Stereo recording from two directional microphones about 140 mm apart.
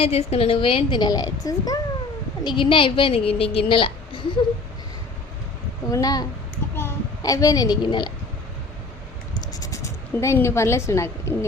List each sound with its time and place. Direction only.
0.0 s a woman's voice: 45° left (ahead or behind)
5.9 s a child's voice: 25° left (ahead or behind)
9.3 s scratch: 25° left (ahead or behind)